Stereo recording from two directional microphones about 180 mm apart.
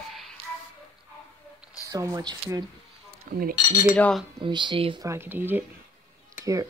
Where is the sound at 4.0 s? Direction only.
5° left (ahead or behind).